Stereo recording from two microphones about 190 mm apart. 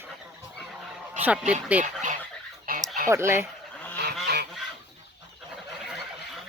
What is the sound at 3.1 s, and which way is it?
Speech, 15° right (ahead or behind).